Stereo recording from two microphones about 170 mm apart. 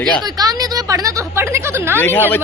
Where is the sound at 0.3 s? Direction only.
20° right (ahead or behind).